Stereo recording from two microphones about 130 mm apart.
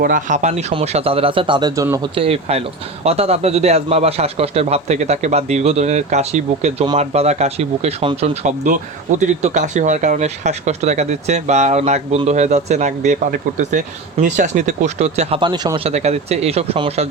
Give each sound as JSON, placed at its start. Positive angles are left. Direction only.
{"t": 0.1, "sound": "speech", "side_deg": -70}
{"t": 0.7, "sound": "a man's voice", "side_deg": -45}
{"t": 2.1, "sound": "a man's voice", "side_deg": -50}
{"t": 4.9, "sound": "speech", "side_deg": -65}
{"t": 8.6, "sound": "speech", "side_deg": -80}
{"t": 15.4, "sound": "a man's voice", "side_deg": -40}
{"t": 15.9, "sound": "speech", "side_deg": -55}